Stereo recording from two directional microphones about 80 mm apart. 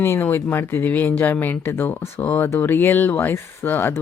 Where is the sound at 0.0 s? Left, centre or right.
Left.